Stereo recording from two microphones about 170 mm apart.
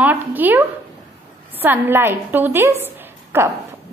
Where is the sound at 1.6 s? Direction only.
10° right (ahead or behind).